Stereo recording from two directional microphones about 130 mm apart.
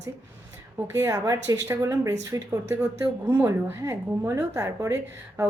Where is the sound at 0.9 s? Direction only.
25° right (ahead or behind).